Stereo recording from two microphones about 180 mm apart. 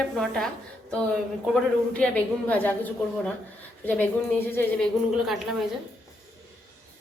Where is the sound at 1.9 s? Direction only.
10° left (ahead or behind).